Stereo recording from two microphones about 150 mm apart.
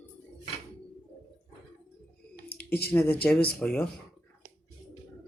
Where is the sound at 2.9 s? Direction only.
15° left (ahead or behind).